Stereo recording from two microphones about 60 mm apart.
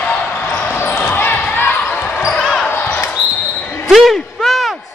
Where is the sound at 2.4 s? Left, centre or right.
Centre.